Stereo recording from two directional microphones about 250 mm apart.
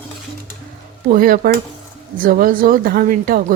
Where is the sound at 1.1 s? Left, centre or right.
Right.